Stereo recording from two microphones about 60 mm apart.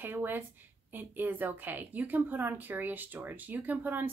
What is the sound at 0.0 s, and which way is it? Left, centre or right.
A woman's voice, right.